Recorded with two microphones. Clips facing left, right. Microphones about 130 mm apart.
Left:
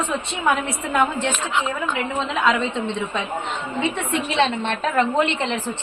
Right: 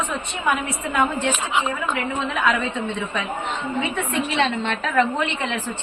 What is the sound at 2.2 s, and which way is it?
Speech, 25° left (ahead or behind).